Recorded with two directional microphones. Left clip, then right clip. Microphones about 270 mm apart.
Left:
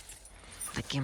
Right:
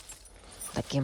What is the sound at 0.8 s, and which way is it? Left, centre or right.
Speech, centre.